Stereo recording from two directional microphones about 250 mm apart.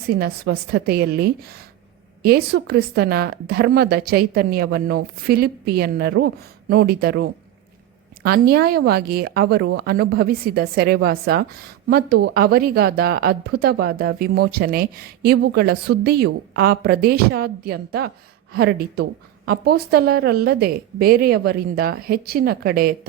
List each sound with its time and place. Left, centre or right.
0.1 s a woman's voice: right